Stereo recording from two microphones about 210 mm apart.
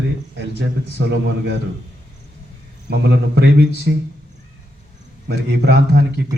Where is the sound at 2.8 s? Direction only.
55° right (ahead or behind).